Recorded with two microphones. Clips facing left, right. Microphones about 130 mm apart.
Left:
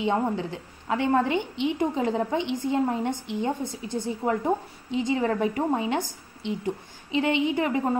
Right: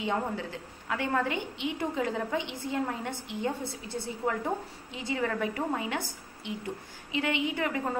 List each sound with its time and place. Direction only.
0.0 s a woman's voice: 25° left (ahead or behind)